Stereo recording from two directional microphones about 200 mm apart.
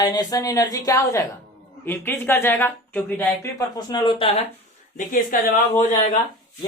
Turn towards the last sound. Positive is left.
turn(degrees=35)  # may be behind; listen again after turning